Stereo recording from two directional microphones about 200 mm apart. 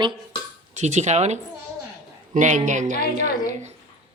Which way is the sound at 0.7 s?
35° right (ahead or behind).